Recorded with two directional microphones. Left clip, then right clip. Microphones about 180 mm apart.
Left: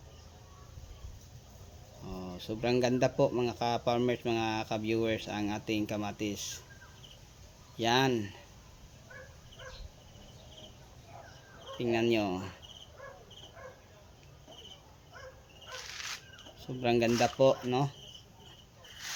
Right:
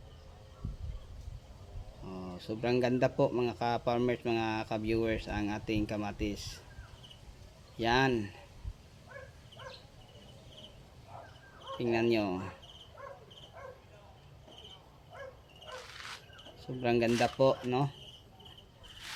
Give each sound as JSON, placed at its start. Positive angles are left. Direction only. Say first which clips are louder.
{"t": 2.0, "sound": "speech", "louder": "left 1 dB", "side_deg": 5}
{"t": 7.8, "sound": "speech", "louder": "left 1 dB", "side_deg": 5}
{"t": 11.8, "sound": "speech", "louder": "left 1 dB", "side_deg": 0}
{"t": 16.8, "sound": "speech", "louder": "left 1 dB", "side_deg": 5}